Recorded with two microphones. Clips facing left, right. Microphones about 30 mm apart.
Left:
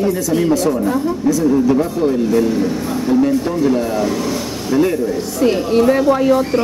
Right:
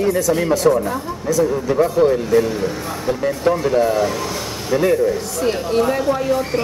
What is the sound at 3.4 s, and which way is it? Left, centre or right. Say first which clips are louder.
Speech: right 1 dB; right.